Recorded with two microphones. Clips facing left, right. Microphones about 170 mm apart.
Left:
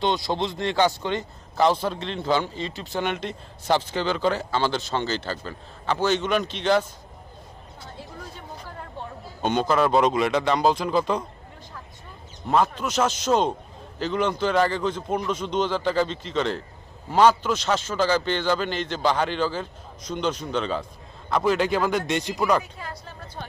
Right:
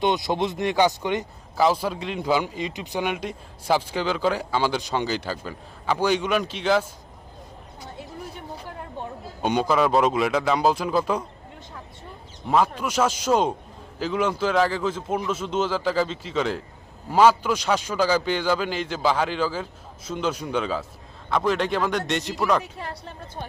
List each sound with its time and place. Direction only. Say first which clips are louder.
0.0 s speech: right 2 dB; 20° right (ahead or behind)
1.5 s speech: even; 5° right (ahead or behind)
9.0 s a sound: right 3 dB; 15° right (ahead or behind)
9.4 s a man's voice: even; 5° right (ahead or behind)
12.5 s a man's voice: even; 10° right (ahead or behind)